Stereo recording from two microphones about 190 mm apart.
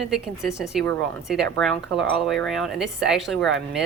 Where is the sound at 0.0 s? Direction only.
Centre (ahead or behind).